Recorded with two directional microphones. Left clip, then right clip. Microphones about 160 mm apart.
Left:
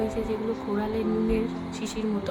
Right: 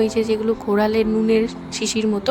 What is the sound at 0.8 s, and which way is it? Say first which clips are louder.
A woman's voice: right 8 dB; 80° right.